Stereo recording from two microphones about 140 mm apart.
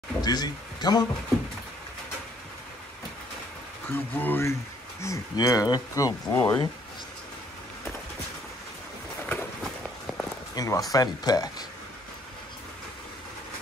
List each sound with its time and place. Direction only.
0.2 s speech: 30° left (ahead or behind)
3.9 s speech: 15° left (ahead or behind)
9.2 s run: 15° left (ahead or behind)
10.5 s speech: 25° left (ahead or behind)